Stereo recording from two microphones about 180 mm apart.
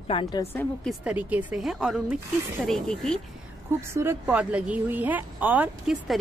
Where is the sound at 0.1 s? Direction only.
25° left (ahead or behind).